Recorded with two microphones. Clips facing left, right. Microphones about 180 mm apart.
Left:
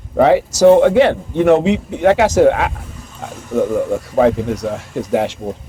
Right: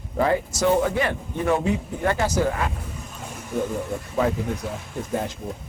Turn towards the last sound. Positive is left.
turn(degrees=85)